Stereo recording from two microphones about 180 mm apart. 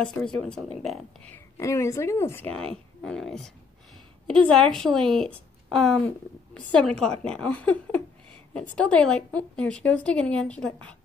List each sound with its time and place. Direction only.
0.0 s a woman's voice: 5° left (ahead or behind)
1.6 s a woman's voice: 15° left (ahead or behind)